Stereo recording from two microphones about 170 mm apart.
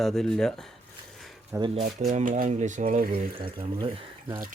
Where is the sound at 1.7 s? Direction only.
40° right (ahead or behind).